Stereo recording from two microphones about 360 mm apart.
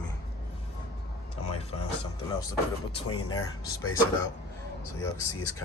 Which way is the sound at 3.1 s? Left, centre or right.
Left.